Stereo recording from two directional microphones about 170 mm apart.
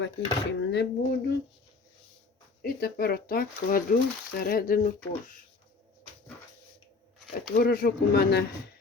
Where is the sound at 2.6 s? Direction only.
65° left (ahead or behind).